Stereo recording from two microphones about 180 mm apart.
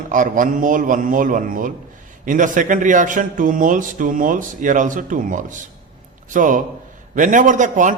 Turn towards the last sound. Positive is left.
turn(degrees=-45)  # may be behind; listen again after turning